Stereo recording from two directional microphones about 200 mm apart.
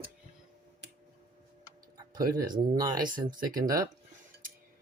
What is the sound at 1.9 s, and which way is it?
Tick-tock, 20° right (ahead or behind).